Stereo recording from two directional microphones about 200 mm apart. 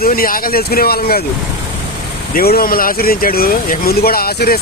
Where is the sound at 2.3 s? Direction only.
50° left (ahead or behind).